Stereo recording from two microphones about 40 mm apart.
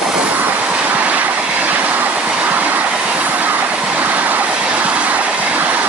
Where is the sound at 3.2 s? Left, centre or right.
Right.